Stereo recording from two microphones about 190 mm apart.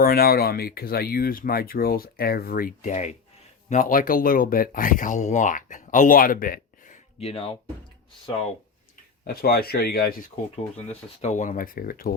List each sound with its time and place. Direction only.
0.0 s speech: 50° left (ahead or behind)
7.2 s speech: 30° left (ahead or behind)
9.2 s speech: 55° left (ahead or behind)
11.2 s speech: 40° left (ahead or behind)